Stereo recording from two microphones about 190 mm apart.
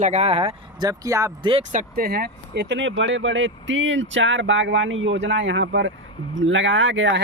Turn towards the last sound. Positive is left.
turn(degrees=-75)  # may be behind; listen again after turning